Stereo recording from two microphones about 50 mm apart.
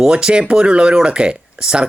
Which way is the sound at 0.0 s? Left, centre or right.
Centre.